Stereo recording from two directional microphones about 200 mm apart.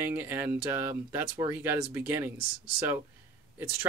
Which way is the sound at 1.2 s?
25° right (ahead or behind).